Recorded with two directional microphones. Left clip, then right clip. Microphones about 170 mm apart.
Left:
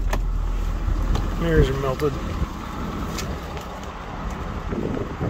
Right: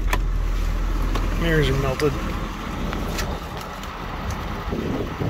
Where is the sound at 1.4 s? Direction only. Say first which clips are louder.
Left 1 dB; 25° left (ahead or behind).